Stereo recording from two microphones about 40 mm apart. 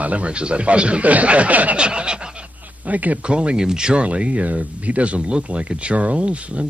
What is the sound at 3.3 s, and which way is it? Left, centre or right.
Speech, right.